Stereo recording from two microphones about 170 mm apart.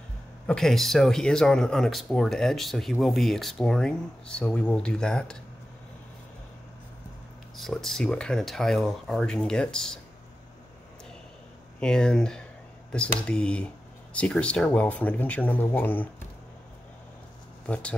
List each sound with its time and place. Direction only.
0.5 s speech: 5° left (ahead or behind)
7.5 s speech: centre (ahead or behind)
11.8 s speech: 5° left (ahead or behind)